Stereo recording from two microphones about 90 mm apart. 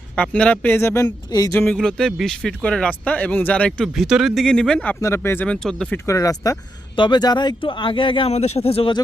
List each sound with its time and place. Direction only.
0.2 s speech: 15° left (ahead or behind)
1.0 s speech: 45° left (ahead or behind)
1.5 s speech: 15° left (ahead or behind)
3.7 s speech: centre (ahead or behind)
4.9 s speech: 30° left (ahead or behind)
5.5 s speech: 5° left (ahead or behind)
6.1 s speech: 40° left (ahead or behind)
6.9 s speech: 60° left (ahead or behind)
7.6 s speech: 70° left (ahead or behind); by 9.0 s 90° left